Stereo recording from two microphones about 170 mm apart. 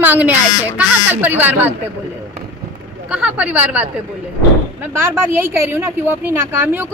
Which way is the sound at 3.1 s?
5° right (ahead or behind).